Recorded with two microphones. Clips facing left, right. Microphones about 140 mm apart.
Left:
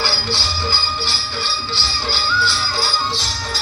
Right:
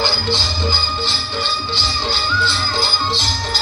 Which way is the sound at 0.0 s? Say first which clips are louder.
Right 3 dB; 20° right (ahead or behind).